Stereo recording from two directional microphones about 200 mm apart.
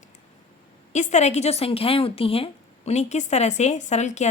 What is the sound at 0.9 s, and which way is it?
A woman's voice, 35° left (ahead or behind).